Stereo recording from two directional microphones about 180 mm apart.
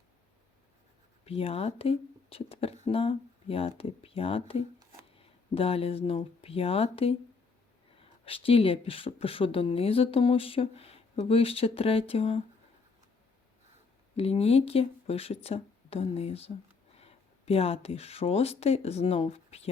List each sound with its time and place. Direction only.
1.2 s speech: 35° left (ahead or behind)
8.2 s speech: 30° left (ahead or behind)
14.2 s speech: 35° left (ahead or behind)